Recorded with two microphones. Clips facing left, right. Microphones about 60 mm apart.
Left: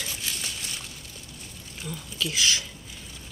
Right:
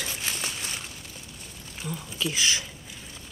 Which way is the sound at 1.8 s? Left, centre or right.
Centre.